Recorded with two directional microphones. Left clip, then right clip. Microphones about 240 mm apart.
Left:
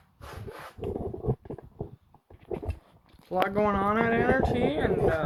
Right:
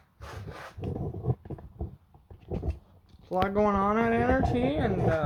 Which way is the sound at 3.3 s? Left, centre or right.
Centre.